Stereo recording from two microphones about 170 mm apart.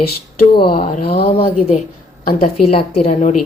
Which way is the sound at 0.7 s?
55° left (ahead or behind).